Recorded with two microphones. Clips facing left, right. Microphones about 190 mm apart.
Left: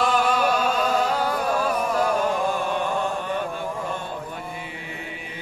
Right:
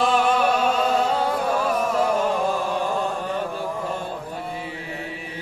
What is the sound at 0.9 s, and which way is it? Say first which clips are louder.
Music: right 1 dB; 25° right (ahead or behind).